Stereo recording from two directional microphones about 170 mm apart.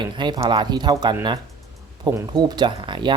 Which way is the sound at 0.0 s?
25° right (ahead or behind).